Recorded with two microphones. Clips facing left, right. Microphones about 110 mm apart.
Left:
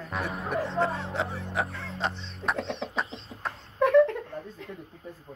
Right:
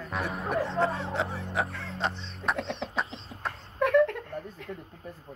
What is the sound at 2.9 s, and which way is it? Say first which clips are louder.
Bird: even; centre (ahead or behind).